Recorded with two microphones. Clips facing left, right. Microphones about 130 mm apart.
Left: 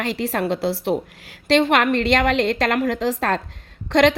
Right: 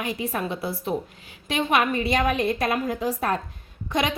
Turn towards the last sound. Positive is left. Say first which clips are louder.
# left 9 dB
turn(degrees=85)